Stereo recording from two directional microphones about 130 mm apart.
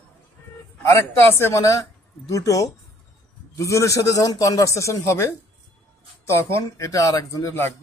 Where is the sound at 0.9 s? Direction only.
20° left (ahead or behind).